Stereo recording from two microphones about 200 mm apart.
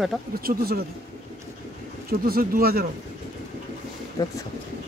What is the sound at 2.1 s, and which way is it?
Speech, 50° right (ahead or behind).